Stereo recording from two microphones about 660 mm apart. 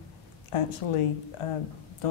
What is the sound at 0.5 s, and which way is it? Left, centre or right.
Speech, left.